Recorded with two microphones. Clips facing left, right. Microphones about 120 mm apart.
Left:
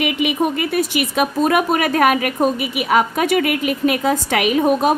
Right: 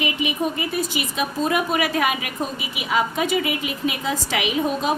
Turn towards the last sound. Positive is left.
turn(degrees=55)  # may be behind; listen again after turning